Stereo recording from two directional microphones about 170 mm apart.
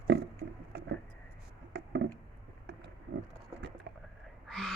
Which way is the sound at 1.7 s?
90° right.